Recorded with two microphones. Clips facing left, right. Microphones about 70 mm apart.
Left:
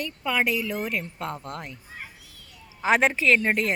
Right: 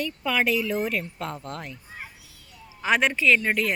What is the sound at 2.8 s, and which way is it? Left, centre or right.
Speech, left.